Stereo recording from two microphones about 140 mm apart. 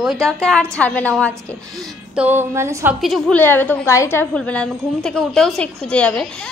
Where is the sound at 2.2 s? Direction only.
15° right (ahead or behind).